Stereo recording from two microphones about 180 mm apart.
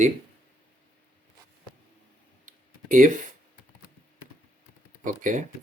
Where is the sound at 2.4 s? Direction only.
50° right (ahead or behind).